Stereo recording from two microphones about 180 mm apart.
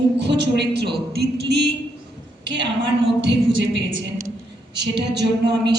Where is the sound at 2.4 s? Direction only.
90° right.